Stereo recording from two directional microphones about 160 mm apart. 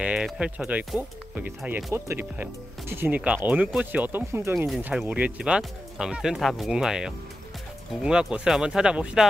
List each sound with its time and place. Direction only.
0.0 s speech: 5° right (ahead or behind)
2.0 s speech: 10° right (ahead or behind)
4.6 s speech: 5° right (ahead or behind)